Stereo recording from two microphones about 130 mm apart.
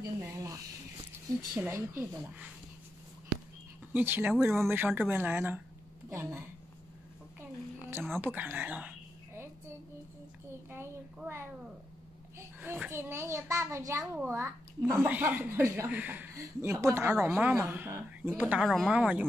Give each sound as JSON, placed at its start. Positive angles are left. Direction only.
{"t": 0.2, "sound": "a sound", "side_deg": -25}
{"t": 1.6, "sound": "speech", "side_deg": -20}
{"t": 3.9, "sound": "speech", "side_deg": -15}
{"t": 8.2, "sound": "a sound", "side_deg": -15}
{"t": 12.4, "sound": "a child's voice", "side_deg": -15}
{"t": 16.3, "sound": "a child's voice", "side_deg": -20}
{"t": 18.6, "sound": "speech", "side_deg": 0}